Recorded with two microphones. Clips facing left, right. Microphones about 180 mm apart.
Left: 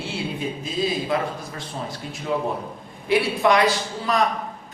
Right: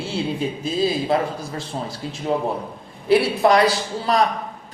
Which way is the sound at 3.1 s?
35° right (ahead or behind).